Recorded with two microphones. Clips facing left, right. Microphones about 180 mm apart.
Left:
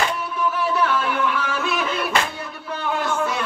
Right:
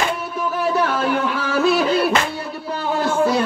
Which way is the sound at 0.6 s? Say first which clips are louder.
Right 4 dB; 40° right (ahead or behind).